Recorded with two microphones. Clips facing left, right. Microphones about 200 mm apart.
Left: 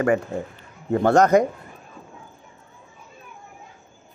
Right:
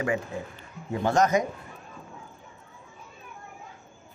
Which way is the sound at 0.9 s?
60° left (ahead or behind).